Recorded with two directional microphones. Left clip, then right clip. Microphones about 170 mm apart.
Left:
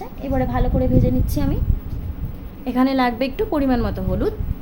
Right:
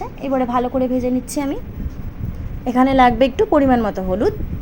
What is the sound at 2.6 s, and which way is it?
A woman's voice, 15° right (ahead or behind).